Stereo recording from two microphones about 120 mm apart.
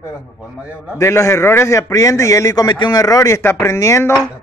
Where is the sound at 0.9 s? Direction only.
25° left (ahead or behind).